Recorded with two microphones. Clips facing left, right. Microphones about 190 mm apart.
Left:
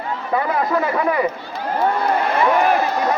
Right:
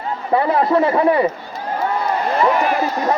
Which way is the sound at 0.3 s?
30° right (ahead or behind).